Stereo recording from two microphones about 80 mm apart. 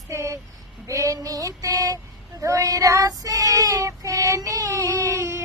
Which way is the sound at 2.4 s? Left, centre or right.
Right.